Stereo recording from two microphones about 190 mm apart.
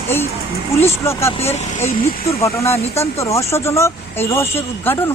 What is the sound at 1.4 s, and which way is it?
Speech, 35° left (ahead or behind).